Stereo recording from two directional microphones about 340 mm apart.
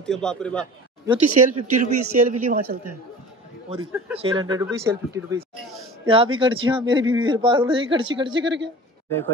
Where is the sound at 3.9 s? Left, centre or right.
Centre.